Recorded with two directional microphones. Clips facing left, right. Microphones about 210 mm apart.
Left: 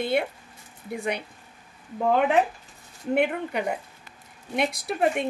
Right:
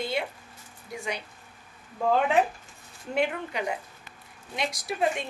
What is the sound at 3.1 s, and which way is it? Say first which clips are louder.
A woman's voice: left 4 dB; 55° left (ahead or behind).